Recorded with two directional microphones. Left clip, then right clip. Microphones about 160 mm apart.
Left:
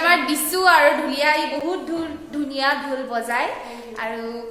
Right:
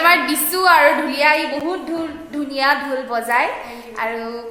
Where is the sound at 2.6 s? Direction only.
30° right (ahead or behind).